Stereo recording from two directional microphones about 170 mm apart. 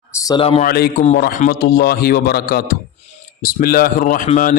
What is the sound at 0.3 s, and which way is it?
Speech, 35° left (ahead or behind).